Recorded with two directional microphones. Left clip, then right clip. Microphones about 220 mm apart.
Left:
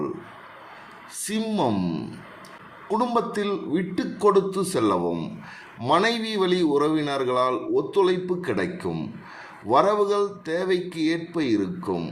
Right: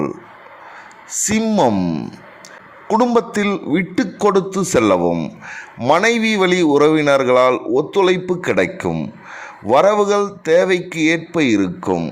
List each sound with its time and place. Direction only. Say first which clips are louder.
1.2 s speech: right 10 dB; 35° right (ahead or behind)